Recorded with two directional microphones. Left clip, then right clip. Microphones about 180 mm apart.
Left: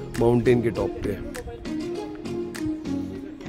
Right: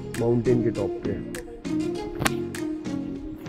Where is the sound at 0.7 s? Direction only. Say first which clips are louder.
Left 1 dB; centre (ahead or behind).